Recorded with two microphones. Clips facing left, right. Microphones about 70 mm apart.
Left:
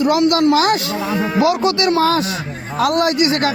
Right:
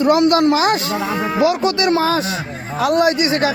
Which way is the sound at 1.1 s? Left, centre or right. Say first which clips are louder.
Left 1 dB; centre.